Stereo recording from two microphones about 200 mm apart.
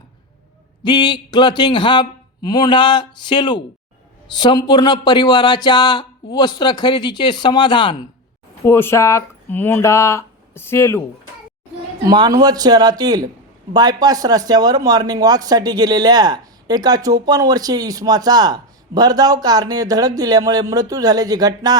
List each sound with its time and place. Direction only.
0.9 s speech: 20° left (ahead or behind)
8.6 s speech: 10° left (ahead or behind)
12.0 s a man's voice: 20° right (ahead or behind)